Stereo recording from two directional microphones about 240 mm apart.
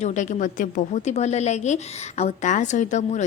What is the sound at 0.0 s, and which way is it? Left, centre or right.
A woman's voice, left.